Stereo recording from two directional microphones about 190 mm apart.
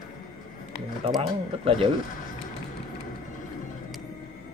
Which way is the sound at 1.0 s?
30° right (ahead or behind).